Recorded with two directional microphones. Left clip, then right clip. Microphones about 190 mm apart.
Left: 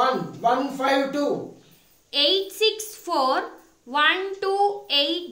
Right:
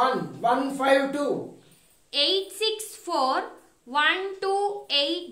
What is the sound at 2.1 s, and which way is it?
A woman's voice, 10° left (ahead or behind).